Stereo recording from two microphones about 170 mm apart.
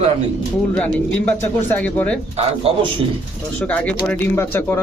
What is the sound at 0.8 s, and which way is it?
A man's voice, 10° left (ahead or behind).